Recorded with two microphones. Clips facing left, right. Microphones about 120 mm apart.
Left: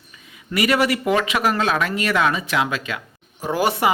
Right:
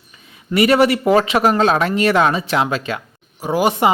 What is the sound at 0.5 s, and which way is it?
Speech, 30° right (ahead or behind).